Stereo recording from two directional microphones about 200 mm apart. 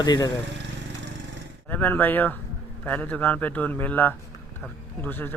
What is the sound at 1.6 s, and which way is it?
Speech, 10° left (ahead or behind).